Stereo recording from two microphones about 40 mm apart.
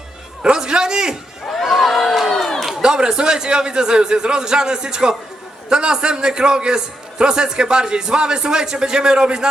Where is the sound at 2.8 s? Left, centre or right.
Centre.